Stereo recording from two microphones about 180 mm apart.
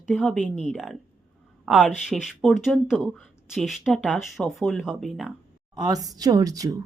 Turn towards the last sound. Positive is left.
turn(degrees=-20)  # may be behind; listen again after turning